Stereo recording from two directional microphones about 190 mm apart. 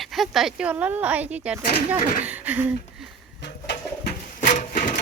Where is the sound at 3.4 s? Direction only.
65° left (ahead or behind).